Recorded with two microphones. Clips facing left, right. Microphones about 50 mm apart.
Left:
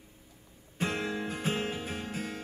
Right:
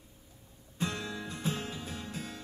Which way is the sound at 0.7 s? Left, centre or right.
Left.